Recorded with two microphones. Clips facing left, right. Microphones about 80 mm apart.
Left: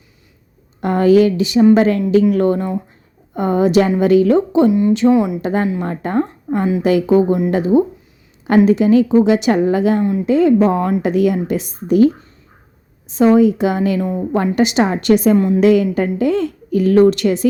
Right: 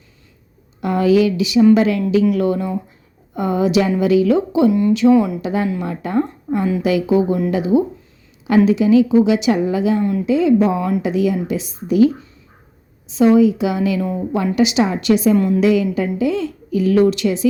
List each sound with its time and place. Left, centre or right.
0.8 s a woman's voice: left
4.7 s speech: left
5.4 s a woman's voice: left
10.0 s speech: left
10.2 s speech: left
11.0 s speech: left
14.0 s a woman's voice: centre
14.3 s speech: left
15.4 s speech: left
15.6 s speech: left